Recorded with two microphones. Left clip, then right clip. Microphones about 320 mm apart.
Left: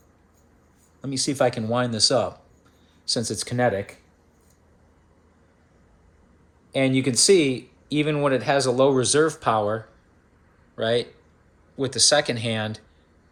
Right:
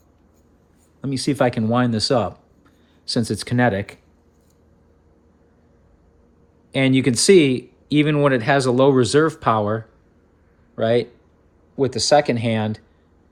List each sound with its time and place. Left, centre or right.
1.0 s speech: right
6.7 s speech: right